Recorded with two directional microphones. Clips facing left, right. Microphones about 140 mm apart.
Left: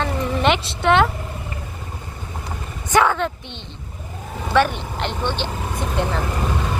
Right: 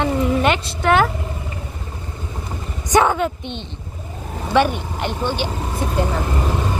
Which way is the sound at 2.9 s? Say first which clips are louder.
Right 2 dB; 15° right (ahead or behind).